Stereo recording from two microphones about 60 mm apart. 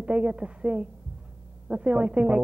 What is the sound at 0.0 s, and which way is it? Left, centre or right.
Speech, centre.